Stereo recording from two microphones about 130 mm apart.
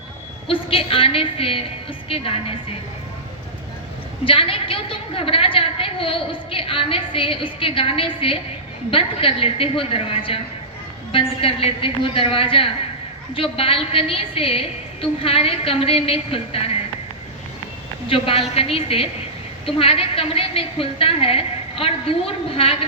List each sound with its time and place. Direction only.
0.4 s a woman's voice: 45° left (ahead or behind)
4.3 s a woman's voice: 45° left (ahead or behind)
18.1 s a woman's voice: 45° left (ahead or behind)